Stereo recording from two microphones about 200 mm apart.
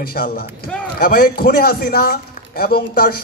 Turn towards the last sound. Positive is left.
turn(degrees=45)  # may be behind; listen again after turning